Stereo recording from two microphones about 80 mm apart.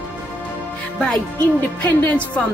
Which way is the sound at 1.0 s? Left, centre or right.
Centre.